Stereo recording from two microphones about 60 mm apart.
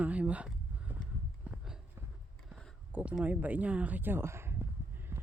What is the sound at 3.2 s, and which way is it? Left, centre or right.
Speech, right.